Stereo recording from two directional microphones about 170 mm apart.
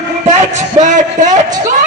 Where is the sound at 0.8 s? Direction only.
45° right (ahead or behind).